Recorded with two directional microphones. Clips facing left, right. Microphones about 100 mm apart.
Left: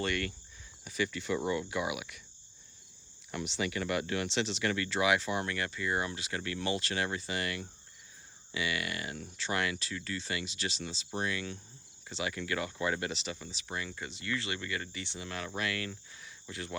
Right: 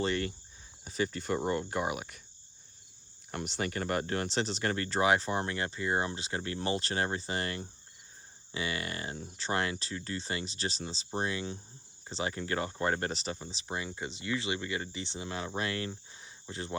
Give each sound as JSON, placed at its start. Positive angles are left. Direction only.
{"t": 0.0, "sound": "speech", "side_deg": -30}
{"t": 3.3, "sound": "speech", "side_deg": -45}